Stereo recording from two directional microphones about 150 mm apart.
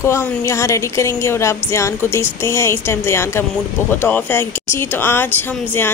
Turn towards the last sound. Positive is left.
turn(degrees=15)  # may be behind; listen again after turning